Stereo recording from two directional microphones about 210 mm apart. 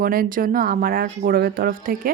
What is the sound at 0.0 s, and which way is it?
Speech, 45° right (ahead or behind).